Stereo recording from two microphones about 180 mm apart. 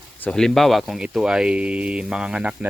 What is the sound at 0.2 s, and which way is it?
Speech, 5° left (ahead or behind).